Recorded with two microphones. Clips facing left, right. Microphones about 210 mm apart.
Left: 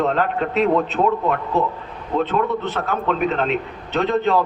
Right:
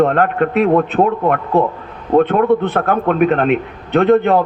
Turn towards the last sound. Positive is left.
turn(degrees=-55)  # may be behind; listen again after turning